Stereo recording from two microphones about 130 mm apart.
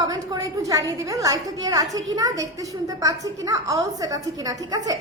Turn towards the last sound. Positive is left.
turn(degrees=-30)  # may be behind; listen again after turning